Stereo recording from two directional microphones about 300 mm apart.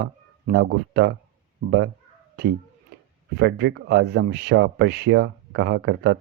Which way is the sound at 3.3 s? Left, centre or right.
Right.